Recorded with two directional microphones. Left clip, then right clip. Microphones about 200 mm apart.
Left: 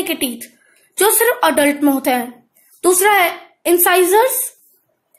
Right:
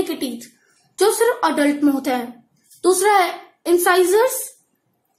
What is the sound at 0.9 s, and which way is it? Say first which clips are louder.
Speech: left 2 dB; 40° left (ahead or behind).